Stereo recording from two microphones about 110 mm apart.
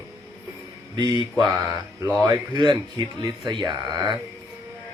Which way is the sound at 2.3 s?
45° right (ahead or behind).